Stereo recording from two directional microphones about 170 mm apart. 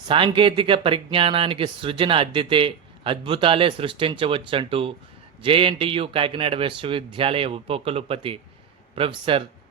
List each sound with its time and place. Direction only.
0.1 s speech: 30° right (ahead or behind)